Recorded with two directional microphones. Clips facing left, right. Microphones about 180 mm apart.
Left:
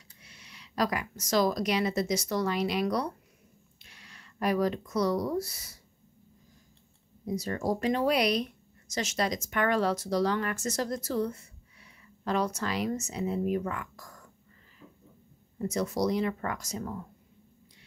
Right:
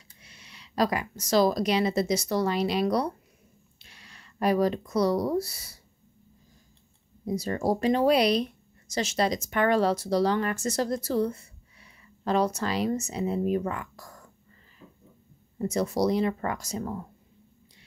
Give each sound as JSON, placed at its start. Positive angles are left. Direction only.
{"t": 0.2, "sound": "speech", "side_deg": -25}
{"t": 7.2, "sound": "speech", "side_deg": -30}
{"t": 15.6, "sound": "speech", "side_deg": -30}